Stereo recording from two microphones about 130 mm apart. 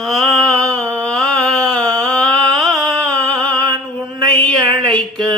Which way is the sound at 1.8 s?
30° right (ahead or behind).